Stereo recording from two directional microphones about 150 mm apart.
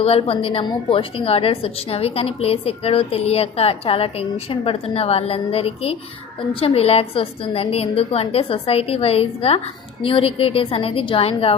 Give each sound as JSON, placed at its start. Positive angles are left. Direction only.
{"t": 0.0, "sound": "a woman's voice", "side_deg": 40}